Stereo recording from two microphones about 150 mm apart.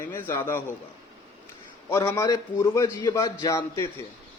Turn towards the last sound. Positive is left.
turn(degrees=20)  # may be behind; listen again after turning